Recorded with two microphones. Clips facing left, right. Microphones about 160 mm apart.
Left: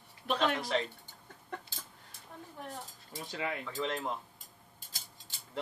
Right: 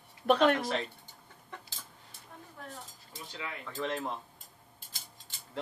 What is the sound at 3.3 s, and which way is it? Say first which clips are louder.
Cutlery: left 6 dB; 60° left (ahead or behind).